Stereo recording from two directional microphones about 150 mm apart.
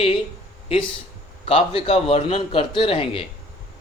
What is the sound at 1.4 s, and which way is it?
A man's voice, 40° left (ahead or behind).